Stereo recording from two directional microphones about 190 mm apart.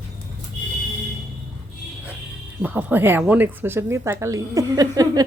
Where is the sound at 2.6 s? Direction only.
10° right (ahead or behind).